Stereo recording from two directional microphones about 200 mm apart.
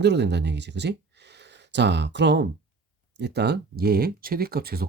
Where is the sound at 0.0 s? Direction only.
60° right (ahead or behind).